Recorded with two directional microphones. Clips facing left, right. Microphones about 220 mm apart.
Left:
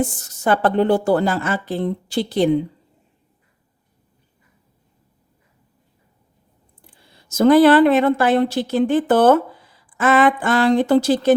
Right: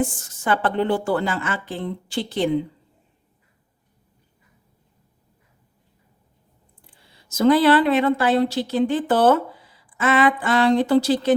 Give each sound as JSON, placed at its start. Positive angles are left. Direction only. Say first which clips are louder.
{"t": 0.0, "sound": "a woman's voice", "louder": "left 3 dB", "side_deg": 40}
{"t": 6.8, "sound": "a woman's voice", "louder": "left 4 dB", "side_deg": 50}